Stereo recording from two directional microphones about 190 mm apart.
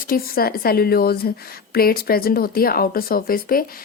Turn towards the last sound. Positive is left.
turn(degrees=50)  # may be behind; listen again after turning